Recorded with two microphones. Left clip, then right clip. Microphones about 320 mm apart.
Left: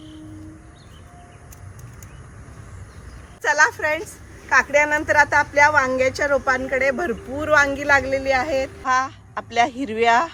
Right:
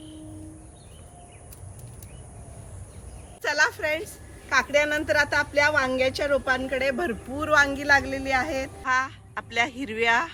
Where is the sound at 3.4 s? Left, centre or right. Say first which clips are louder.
Left 6 dB; centre.